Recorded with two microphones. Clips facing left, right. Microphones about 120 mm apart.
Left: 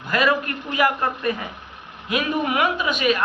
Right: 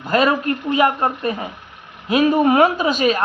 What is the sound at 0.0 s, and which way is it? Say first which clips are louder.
A man's voice: right 4 dB; 30° right (ahead or behind).